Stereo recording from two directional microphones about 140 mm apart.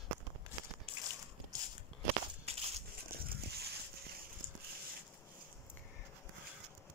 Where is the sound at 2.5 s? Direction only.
45° right (ahead or behind).